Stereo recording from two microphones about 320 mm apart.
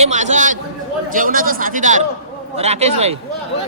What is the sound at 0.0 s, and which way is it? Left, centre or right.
A man's voice, right.